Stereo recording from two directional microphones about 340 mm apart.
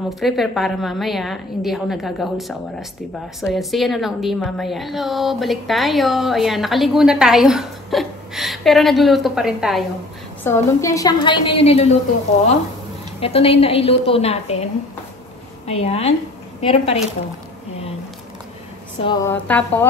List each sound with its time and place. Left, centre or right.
0.2 s a woman's voice: centre
13.2 s a woman's voice: centre
18.9 s a woman's voice: centre